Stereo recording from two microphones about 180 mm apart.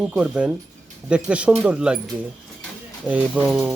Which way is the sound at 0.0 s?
5° right (ahead or behind).